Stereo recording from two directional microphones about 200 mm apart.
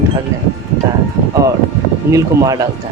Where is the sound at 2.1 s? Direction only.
15° right (ahead or behind).